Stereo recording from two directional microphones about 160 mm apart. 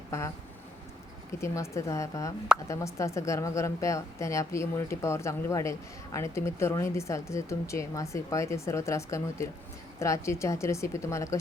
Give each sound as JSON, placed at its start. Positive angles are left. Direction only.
{"t": 1.4, "sound": "a woman's voice", "side_deg": 20}